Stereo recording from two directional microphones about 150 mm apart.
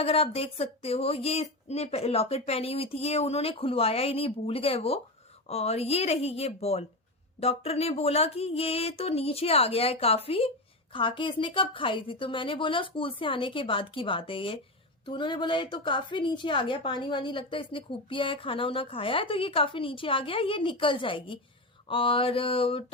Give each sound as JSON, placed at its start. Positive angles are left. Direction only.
{"t": 0.0, "sound": "a woman's voice", "side_deg": 40}